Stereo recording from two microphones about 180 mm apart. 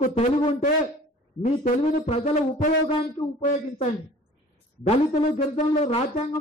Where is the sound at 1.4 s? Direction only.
45° left (ahead or behind).